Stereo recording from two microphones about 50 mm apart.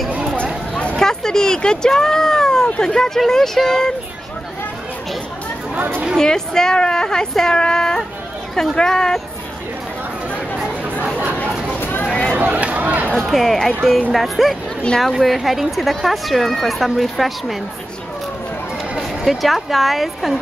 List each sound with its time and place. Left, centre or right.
0.9 s speech: centre
5.8 s speech: right
6.1 s speech: centre
10.6 s chatter: right
11.8 s a sound: left
12.1 s a sound: centre
12.4 s a sound: right
13.1 s speech: centre
19.2 s speech: centre